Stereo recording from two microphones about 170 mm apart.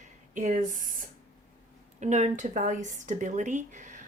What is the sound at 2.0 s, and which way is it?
Speech, 40° right (ahead or behind).